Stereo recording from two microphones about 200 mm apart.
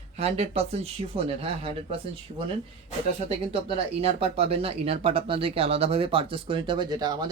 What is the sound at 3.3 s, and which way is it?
Speech, 30° right (ahead or behind).